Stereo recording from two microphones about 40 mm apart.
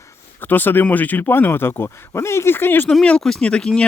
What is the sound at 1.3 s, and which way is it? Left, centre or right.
Speech, left.